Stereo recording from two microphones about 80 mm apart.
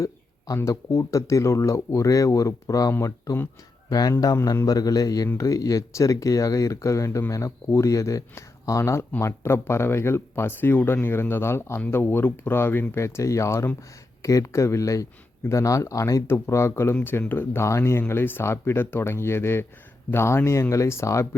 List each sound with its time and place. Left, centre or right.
0.0 s speech: left
3.8 s speech: left